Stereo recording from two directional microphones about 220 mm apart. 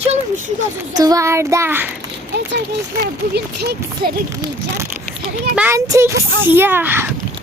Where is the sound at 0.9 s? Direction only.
15° right (ahead or behind).